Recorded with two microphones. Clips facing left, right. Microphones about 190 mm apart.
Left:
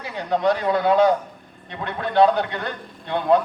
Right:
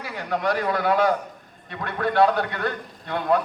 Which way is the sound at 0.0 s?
25° left (ahead or behind).